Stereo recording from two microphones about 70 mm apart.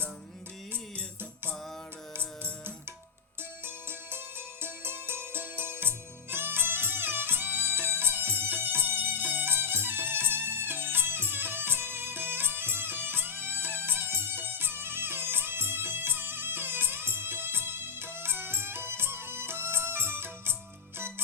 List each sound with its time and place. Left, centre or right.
4.6 s music: right